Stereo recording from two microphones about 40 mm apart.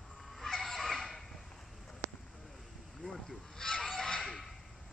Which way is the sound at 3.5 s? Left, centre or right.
Centre.